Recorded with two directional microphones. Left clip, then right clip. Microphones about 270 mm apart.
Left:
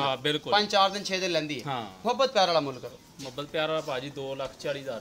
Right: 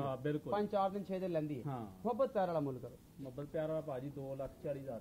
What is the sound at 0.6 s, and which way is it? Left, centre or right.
A man's voice, centre.